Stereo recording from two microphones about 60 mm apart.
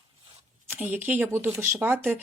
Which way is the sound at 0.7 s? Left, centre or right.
Right.